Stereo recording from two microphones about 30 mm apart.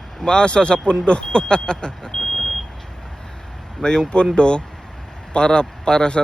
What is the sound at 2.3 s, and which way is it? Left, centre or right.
Vehicle, centre.